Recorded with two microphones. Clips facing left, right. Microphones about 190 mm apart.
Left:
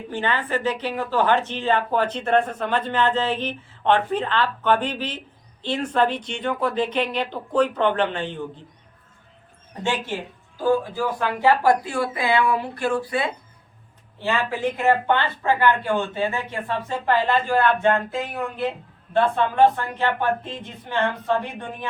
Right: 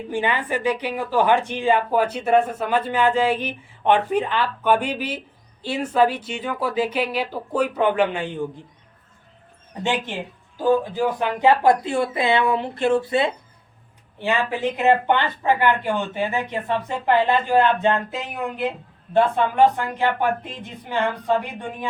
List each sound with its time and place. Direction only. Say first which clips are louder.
0.1 s a woman's voice: right 1 dB; 15° right (ahead or behind)
9.8 s a woman's voice: right 1 dB; 15° right (ahead or behind)